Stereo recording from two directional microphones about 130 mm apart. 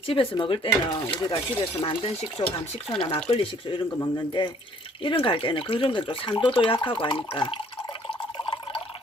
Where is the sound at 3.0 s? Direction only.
50° left (ahead or behind).